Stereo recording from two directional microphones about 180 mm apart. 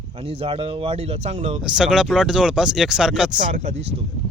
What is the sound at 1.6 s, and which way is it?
Speech, 5° right (ahead or behind).